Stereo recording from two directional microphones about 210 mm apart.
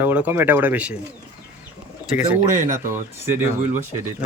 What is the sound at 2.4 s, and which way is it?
Speech, 35° right (ahead or behind).